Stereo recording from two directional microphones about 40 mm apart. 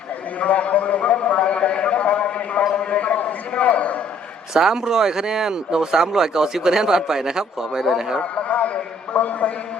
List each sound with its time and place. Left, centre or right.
0.3 s a sound: left
4.5 s a man's voice: centre
8.2 s a man's voice: left